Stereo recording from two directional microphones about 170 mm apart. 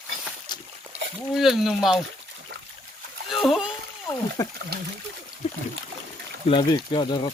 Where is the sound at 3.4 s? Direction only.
Centre (ahead or behind).